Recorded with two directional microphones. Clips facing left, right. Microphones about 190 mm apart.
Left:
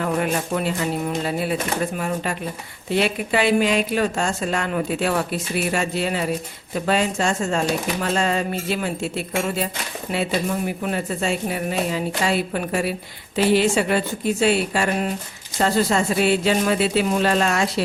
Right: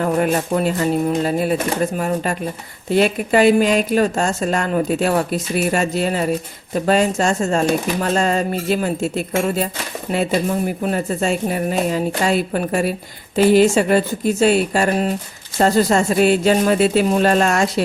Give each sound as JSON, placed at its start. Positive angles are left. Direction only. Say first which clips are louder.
{"t": 0.0, "sound": "a woman's voice", "louder": "right 5 dB", "side_deg": -40}
{"t": 2.9, "sound": "a woman's voice", "louder": "right 5 dB", "side_deg": -45}
{"t": 10.7, "sound": "a woman's voice", "louder": "right 4 dB", "side_deg": -45}